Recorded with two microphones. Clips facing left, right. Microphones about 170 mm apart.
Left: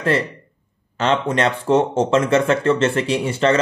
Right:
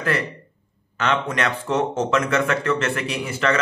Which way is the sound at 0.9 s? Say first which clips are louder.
Left 4 dB; 30° left (ahead or behind).